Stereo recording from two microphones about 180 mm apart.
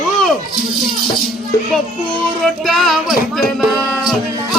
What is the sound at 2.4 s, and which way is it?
Music, centre (ahead or behind).